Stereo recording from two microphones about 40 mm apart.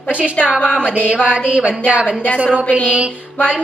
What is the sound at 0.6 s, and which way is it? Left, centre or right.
Speech, left.